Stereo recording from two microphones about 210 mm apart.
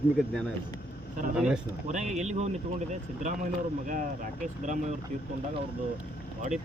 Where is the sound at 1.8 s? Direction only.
35° right (ahead or behind).